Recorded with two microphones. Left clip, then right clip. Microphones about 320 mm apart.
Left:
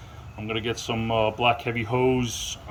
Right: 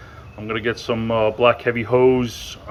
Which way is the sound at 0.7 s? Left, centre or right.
Centre.